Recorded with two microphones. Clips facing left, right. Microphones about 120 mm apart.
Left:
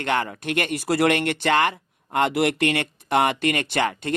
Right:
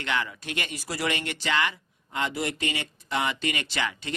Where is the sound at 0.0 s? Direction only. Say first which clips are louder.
Left 6 dB; 50° left (ahead or behind).